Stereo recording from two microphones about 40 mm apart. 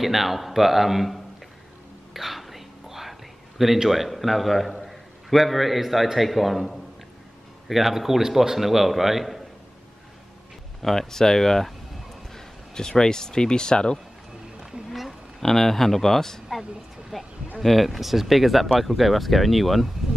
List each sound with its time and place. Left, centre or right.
0.0 s a man's voice: centre
10.8 s speech: centre
14.9 s a sound: centre
15.4 s speech: centre
17.1 s a man's voice: centre